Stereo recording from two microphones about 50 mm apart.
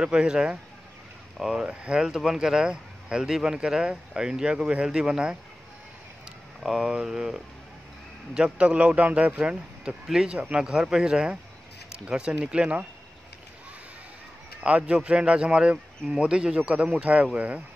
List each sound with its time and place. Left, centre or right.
0.0 s speech: centre
6.6 s speech: centre
8.5 s speech: right
14.6 s a man's voice: right